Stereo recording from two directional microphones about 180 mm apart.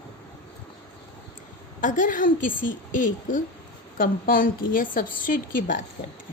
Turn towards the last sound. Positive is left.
turn(degrees=50)  # may be behind; listen again after turning